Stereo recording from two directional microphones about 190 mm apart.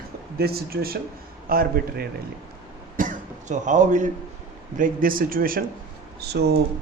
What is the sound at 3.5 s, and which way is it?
A man's voice, 40° right (ahead or behind).